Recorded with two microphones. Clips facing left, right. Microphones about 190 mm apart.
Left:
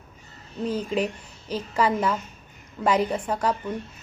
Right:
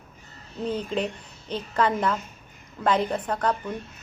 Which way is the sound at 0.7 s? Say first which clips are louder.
Left 2 dB; 5° left (ahead or behind).